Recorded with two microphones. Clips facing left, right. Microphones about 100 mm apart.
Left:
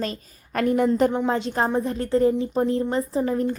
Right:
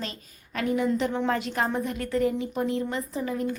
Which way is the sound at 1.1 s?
20° left (ahead or behind).